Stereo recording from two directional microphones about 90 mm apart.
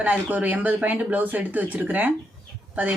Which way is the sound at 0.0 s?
20° right (ahead or behind).